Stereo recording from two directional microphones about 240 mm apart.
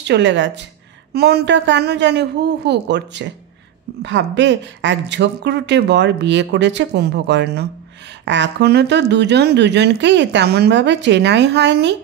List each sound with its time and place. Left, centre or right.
0.0 s speech: right